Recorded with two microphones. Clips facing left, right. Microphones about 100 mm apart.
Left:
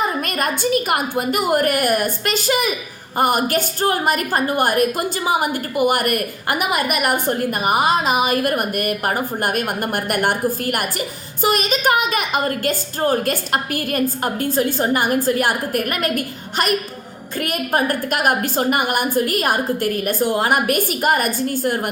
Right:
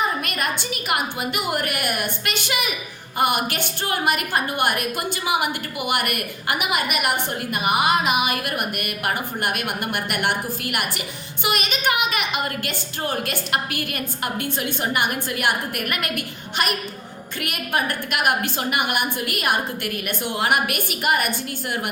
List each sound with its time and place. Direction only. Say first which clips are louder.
0.2 s a woman's voice: left 5 dB; 40° left (ahead or behind)